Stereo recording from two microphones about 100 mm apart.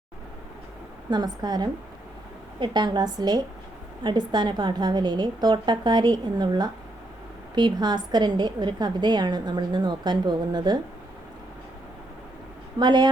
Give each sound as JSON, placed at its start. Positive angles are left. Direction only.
{"t": 1.1, "sound": "a woman's voice", "side_deg": -45}
{"t": 12.8, "sound": "a woman's voice", "side_deg": -50}